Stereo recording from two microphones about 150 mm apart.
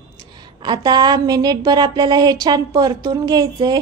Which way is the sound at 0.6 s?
30° right (ahead or behind).